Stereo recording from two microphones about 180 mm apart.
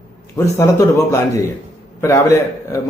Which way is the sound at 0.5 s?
15° left (ahead or behind).